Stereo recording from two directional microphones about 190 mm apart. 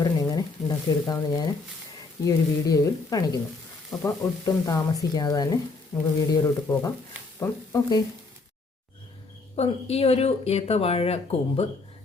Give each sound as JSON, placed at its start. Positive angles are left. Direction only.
{"t": 0.0, "sound": "a sound", "side_deg": 20}
{"t": 2.2, "sound": "speech", "side_deg": 20}
{"t": 9.6, "sound": "speech", "side_deg": 30}